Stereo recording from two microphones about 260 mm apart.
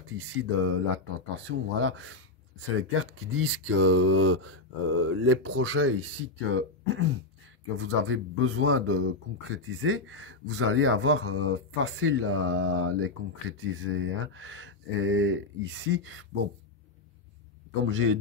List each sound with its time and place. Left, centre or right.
0.4 s speech: right
17.8 s speech: right